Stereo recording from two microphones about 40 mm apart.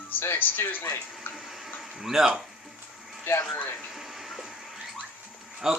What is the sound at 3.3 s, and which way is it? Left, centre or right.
Speech, left.